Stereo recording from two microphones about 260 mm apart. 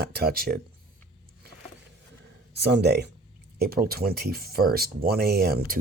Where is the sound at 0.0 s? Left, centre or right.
Right.